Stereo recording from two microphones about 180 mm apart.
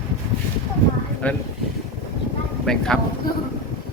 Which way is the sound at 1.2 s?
10° left (ahead or behind).